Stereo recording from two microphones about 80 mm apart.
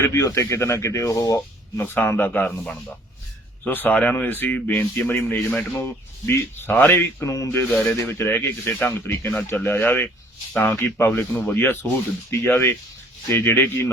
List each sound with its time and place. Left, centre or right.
0.0 s speech: left
1.8 s speech: left
3.6 s speech: left